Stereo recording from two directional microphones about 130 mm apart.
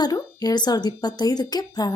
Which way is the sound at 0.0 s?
30° left (ahead or behind).